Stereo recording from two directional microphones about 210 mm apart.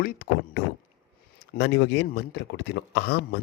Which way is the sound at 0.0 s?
50° left (ahead or behind).